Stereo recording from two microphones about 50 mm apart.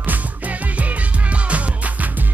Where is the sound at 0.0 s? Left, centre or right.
Right.